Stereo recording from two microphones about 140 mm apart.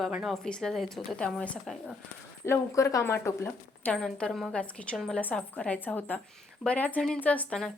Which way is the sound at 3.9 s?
5° left (ahead or behind).